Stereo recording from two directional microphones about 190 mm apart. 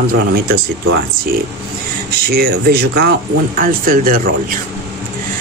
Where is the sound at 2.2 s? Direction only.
55° right (ahead or behind).